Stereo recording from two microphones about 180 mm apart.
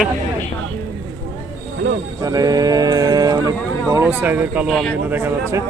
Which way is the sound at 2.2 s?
20° right (ahead or behind).